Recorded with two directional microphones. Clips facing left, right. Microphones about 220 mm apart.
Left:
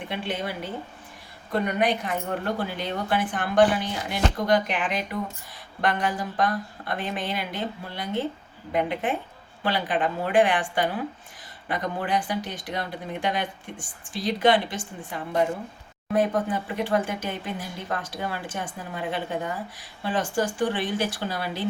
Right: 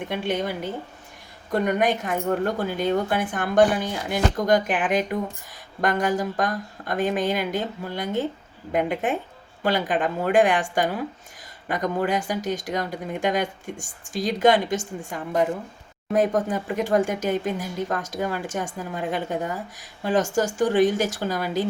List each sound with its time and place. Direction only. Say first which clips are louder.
0.0 s speech: right 4 dB; 45° right (ahead or behind)